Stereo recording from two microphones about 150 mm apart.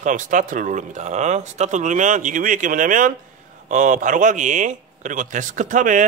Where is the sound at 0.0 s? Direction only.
60° right (ahead or behind).